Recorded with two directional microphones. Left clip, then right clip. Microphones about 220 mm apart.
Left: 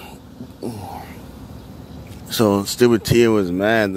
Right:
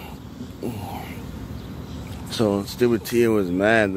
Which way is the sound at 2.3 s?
30° left (ahead or behind).